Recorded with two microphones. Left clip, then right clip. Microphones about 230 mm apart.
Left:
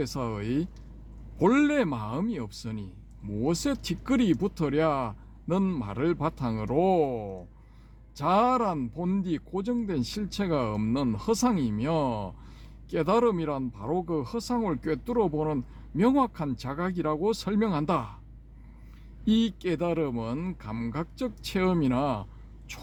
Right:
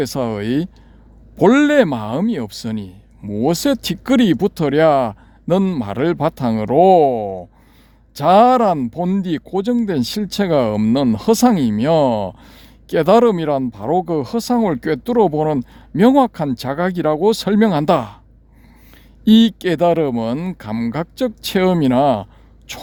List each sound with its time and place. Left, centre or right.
0.0 s speech: right
19.2 s speech: right